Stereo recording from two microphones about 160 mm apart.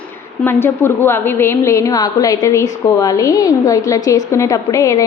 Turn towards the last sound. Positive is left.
turn(degrees=20)  # may be behind; listen again after turning